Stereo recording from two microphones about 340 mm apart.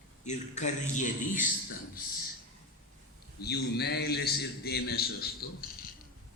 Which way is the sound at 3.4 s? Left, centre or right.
Left.